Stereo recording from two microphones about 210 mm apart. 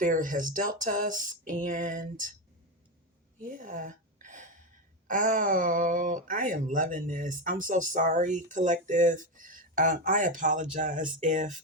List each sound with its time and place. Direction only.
0.0 s speech: 40° right (ahead or behind)
3.4 s a sound: 40° right (ahead or behind)
5.0 s speech: 40° right (ahead or behind)